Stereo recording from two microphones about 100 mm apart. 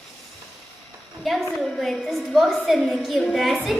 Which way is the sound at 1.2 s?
Centre (ahead or behind).